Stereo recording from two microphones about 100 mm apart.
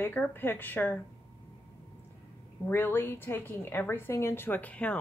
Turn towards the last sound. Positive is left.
turn(degrees=15)  # may be behind; listen again after turning